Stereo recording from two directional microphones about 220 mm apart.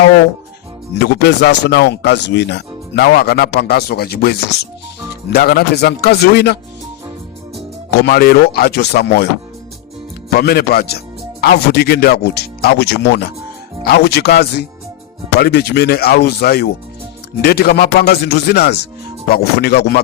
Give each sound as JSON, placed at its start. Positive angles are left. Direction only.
{"t": 0.9, "sound": "speech", "side_deg": 50}
{"t": 7.9, "sound": "speech", "side_deg": 45}
{"t": 10.2, "sound": "speech", "side_deg": 45}